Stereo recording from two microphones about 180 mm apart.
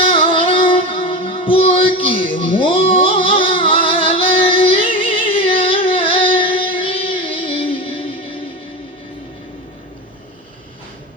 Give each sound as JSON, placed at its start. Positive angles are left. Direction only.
{"t": 0.0, "sound": "music", "side_deg": 30}